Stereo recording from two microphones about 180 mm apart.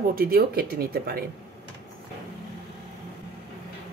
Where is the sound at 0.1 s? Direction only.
55° right (ahead or behind).